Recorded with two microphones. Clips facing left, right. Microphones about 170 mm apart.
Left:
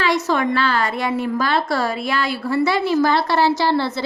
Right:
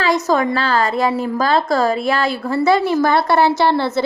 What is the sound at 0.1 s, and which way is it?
A woman's voice, 40° right (ahead or behind).